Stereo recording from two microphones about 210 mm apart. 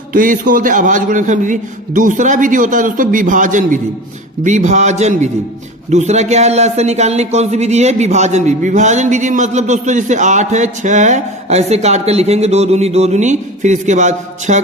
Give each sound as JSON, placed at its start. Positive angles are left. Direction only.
{"t": 0.1, "sound": "speech", "side_deg": -40}